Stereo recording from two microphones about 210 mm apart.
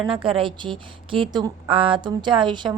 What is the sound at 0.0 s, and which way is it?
A woman's voice, 25° right (ahead or behind).